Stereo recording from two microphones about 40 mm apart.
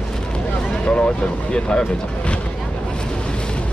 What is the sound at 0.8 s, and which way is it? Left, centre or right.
Speech, left.